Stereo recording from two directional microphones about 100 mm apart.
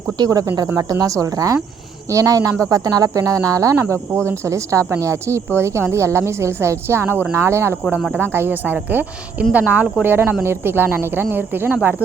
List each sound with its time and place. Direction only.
0.2 s speech: 35° right (ahead or behind)
7.9 s speech: 5° right (ahead or behind)
8.2 s speech: 25° right (ahead or behind)